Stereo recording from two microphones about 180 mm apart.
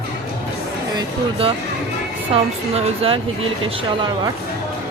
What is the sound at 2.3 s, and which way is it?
Speech, 30° right (ahead or behind).